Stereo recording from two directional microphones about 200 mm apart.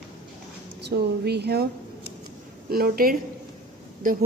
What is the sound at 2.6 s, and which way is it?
A woman's voice, 50° right (ahead or behind).